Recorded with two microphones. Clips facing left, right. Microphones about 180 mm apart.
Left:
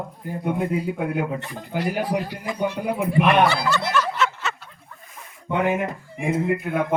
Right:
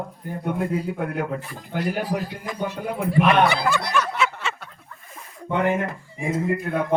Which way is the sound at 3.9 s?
10° right (ahead or behind).